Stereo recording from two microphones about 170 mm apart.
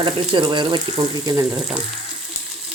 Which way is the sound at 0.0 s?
30° right (ahead or behind).